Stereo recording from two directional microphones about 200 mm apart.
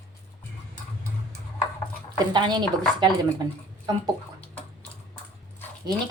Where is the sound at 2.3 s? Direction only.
20° right (ahead or behind).